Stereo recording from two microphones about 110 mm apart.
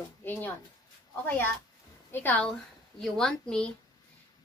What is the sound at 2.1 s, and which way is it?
Speech, 15° left (ahead or behind).